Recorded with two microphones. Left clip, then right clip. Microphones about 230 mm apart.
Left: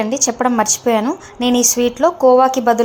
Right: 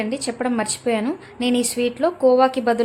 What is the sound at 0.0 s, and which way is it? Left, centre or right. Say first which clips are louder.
A woman's voice: left 8 dB; centre.